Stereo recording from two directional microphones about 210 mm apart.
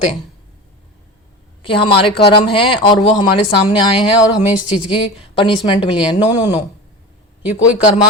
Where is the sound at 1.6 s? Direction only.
25° left (ahead or behind).